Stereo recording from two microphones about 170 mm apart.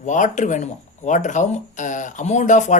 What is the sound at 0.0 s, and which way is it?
Speech, 45° left (ahead or behind).